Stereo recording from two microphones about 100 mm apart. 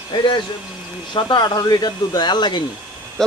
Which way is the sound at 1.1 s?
50° left (ahead or behind).